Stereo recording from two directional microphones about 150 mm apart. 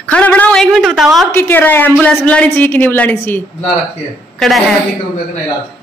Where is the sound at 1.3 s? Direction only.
15° left (ahead or behind).